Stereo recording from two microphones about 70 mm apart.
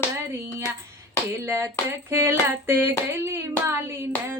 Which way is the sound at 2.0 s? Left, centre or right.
Right.